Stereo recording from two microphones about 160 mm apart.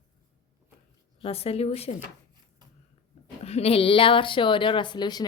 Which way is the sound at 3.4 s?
40° left (ahead or behind).